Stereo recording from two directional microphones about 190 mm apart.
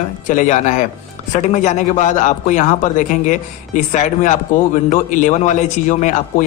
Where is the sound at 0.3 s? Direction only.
40° left (ahead or behind).